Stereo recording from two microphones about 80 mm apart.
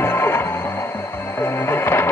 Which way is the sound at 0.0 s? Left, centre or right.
Left.